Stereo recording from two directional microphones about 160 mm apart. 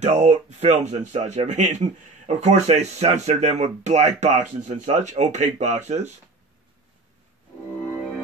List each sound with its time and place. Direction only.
0.0 s speech: 45° right (ahead or behind)